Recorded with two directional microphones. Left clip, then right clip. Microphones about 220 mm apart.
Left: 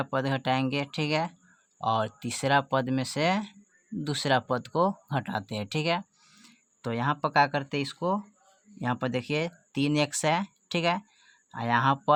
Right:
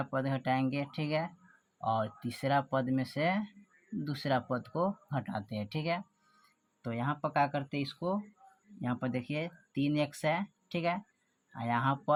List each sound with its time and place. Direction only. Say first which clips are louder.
0.0 s speech: left 6 dB; 35° left (ahead or behind)